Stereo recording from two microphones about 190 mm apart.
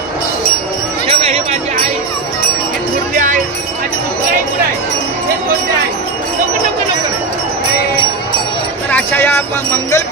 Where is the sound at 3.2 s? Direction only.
40° right (ahead or behind).